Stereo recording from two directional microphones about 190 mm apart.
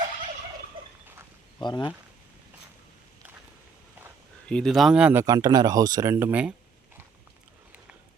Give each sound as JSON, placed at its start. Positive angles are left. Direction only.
{"t": 1.6, "sound": "speech", "side_deg": 25}
{"t": 4.4, "sound": "speech", "side_deg": 5}
{"t": 5.2, "sound": "speech", "side_deg": -20}